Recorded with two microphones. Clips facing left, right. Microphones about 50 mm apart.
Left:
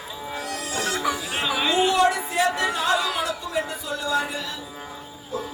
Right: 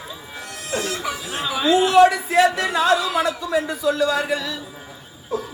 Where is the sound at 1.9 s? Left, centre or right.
Right.